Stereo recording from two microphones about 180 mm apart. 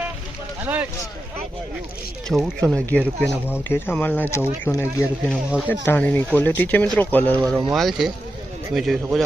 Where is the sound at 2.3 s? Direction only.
Centre (ahead or behind).